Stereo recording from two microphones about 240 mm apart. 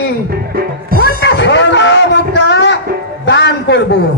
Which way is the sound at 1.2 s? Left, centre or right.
Left.